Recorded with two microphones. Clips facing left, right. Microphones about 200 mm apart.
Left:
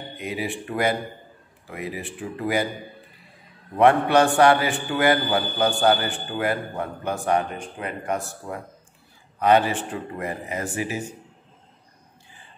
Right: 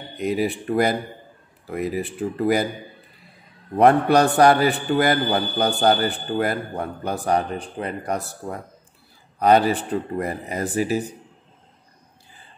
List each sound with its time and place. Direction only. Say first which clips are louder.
0.2 s a man's voice: right 7 dB; 40° right (ahead or behind)
3.7 s a man's voice: right 2 dB; 40° right (ahead or behind)